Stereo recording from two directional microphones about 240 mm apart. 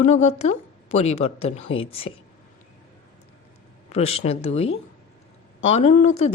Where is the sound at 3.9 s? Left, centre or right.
Left.